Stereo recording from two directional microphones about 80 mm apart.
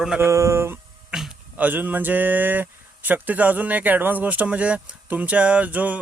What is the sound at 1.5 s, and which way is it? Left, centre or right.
Speech, right.